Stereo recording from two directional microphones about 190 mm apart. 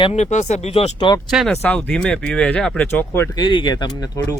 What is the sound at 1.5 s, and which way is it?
Speech, 10° left (ahead or behind).